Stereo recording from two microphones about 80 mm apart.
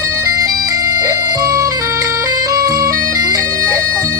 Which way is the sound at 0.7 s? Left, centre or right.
Right.